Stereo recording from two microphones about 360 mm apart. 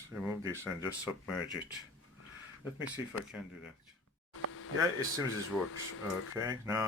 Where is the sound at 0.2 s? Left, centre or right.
Centre.